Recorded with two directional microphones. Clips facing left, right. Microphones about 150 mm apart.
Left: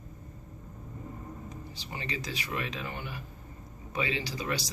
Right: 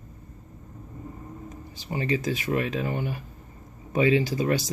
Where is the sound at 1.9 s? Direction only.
50° right (ahead or behind).